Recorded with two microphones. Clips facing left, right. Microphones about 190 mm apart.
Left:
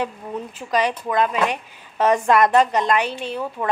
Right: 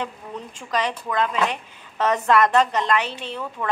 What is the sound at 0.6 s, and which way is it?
Speech, 10° left (ahead or behind).